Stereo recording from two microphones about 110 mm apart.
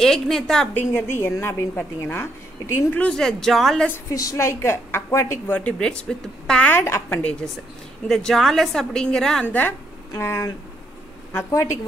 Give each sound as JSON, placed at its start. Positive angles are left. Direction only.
{"t": 0.0, "sound": "speech", "side_deg": 5}
{"t": 0.7, "sound": "a woman's voice", "side_deg": 20}
{"t": 3.0, "sound": "speech", "side_deg": 5}
{"t": 3.9, "sound": "a woman's voice", "side_deg": 30}
{"t": 5.6, "sound": "a woman's voice", "side_deg": 10}
{"t": 6.7, "sound": "a woman's voice", "side_deg": 20}
{"t": 8.1, "sound": "a woman's voice", "side_deg": 5}